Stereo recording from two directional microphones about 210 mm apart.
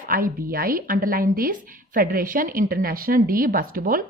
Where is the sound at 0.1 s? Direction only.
45° right (ahead or behind).